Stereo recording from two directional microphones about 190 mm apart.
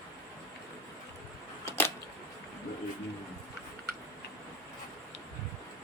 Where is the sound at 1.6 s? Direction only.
15° left (ahead or behind).